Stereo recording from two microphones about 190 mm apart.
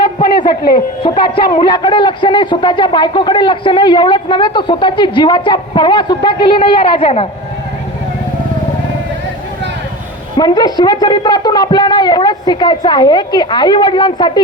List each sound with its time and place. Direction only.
1.0 s speech: 25° left (ahead or behind)
10.3 s speech: 20° left (ahead or behind)